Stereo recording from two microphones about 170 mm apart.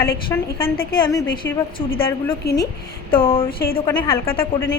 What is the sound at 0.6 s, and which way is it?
Speech, 60° left (ahead or behind).